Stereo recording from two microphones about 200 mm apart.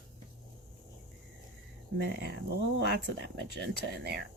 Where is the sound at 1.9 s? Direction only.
55° right (ahead or behind).